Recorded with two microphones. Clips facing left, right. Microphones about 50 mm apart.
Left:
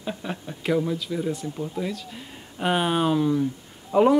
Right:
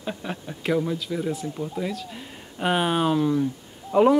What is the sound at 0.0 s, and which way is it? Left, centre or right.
Speech, centre.